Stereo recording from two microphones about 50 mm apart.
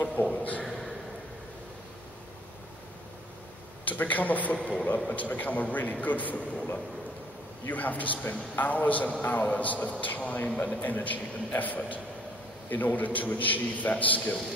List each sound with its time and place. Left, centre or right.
0.0 s a sound: left
0.4 s a man's voice: left
3.8 s a man's voice: left
7.6 s a man's voice: left